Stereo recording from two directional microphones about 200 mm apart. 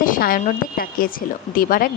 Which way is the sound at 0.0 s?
45° left (ahead or behind).